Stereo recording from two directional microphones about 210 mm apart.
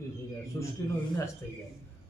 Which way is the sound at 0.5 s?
10° left (ahead or behind).